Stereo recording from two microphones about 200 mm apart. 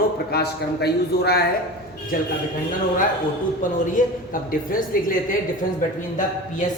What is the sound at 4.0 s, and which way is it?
Speech, 40° left (ahead or behind).